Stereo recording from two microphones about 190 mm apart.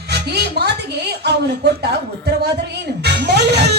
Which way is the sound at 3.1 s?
60° right (ahead or behind).